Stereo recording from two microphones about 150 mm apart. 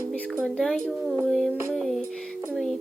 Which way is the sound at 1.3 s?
Centre (ahead or behind).